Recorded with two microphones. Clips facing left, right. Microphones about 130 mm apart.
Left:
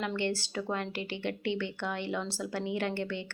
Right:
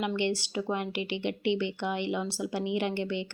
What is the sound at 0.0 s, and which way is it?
A woman's voice, 15° right (ahead or behind).